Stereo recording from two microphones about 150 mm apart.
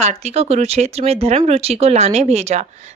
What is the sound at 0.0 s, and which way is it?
Speech, 50° right (ahead or behind).